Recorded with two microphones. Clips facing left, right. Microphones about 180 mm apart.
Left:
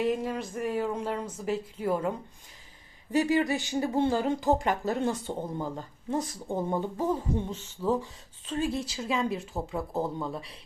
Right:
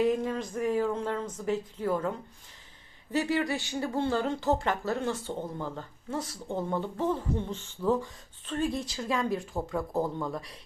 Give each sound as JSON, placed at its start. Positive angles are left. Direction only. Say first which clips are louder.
{"t": 0.0, "sound": "speech", "louder": "right 2 dB", "side_deg": 0}